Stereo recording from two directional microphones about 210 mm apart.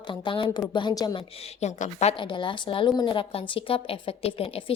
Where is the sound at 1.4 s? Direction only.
30° left (ahead or behind).